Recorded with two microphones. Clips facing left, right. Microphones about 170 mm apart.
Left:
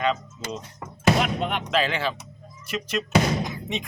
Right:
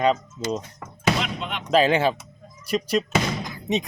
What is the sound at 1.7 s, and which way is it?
Speech, 40° right (ahead or behind).